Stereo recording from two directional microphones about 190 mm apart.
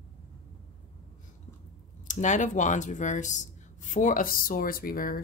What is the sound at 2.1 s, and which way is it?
Speech, 40° left (ahead or behind).